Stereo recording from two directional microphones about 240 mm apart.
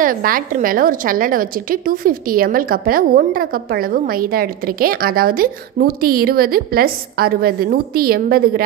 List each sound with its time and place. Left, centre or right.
0.0 s a woman's voice: right